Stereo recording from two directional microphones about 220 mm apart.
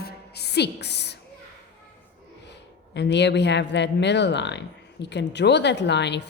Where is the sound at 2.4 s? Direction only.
50° left (ahead or behind).